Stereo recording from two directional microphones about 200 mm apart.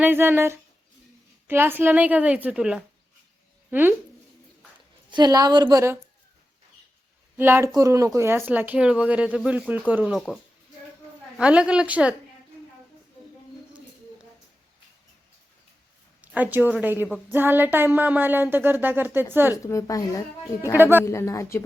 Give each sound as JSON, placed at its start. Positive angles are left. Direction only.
{"t": 0.0, "sound": "speech", "side_deg": -10}
{"t": 5.1, "sound": "a woman's voice", "side_deg": -20}
{"t": 7.3, "sound": "a woman's voice", "side_deg": -10}
{"t": 16.2, "sound": "speech", "side_deg": -10}
{"t": 19.6, "sound": "a woman's voice", "side_deg": 15}
{"t": 20.7, "sound": "speech", "side_deg": -10}
{"t": 21.0, "sound": "a woman's voice", "side_deg": 15}